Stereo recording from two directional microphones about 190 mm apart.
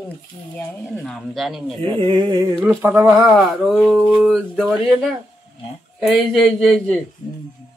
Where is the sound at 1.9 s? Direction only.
25° right (ahead or behind).